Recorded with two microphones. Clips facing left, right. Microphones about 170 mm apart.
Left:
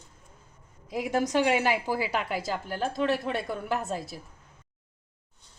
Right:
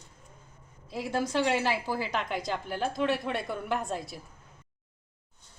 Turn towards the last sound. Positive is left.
turn(degrees=0)  # may be behind; listen again after turning